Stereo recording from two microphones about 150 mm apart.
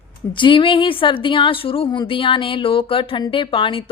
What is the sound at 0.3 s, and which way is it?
A woman's voice, 35° left (ahead or behind).